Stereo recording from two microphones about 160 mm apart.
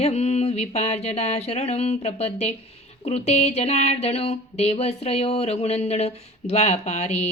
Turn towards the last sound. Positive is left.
turn(degrees=45)  # may be behind; listen again after turning